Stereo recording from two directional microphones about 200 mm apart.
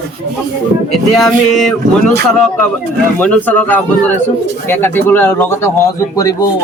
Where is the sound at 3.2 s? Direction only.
10° left (ahead or behind).